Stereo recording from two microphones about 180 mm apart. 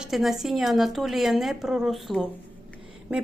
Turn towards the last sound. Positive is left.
turn(degrees=-5)  # may be behind; listen again after turning